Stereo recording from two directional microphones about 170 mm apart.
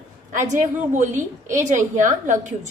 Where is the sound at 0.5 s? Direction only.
45° right (ahead or behind).